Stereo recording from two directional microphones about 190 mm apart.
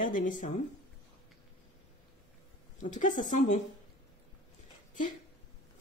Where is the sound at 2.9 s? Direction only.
40° left (ahead or behind).